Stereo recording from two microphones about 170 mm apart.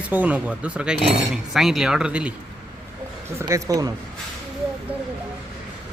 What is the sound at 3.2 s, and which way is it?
Speech, 15° right (ahead or behind).